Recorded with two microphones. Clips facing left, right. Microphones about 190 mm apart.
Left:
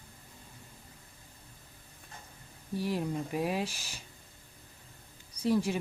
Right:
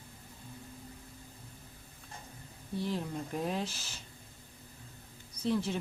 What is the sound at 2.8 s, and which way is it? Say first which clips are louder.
Speech: left 3 dB; 10° left (ahead or behind).